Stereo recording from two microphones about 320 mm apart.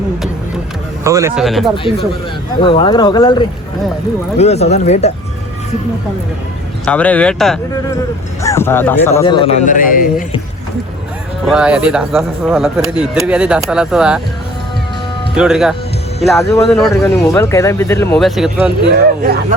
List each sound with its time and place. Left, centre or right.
1.0 s speech: centre
1.7 s speech: centre
6.8 s speech: centre
9.6 s speech: left
11.4 s speech: centre
15.4 s speech: centre